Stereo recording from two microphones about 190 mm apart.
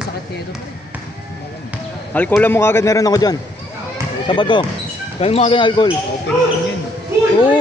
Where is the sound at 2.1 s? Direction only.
10° left (ahead or behind); by 5.9 s 25° left (ahead or behind).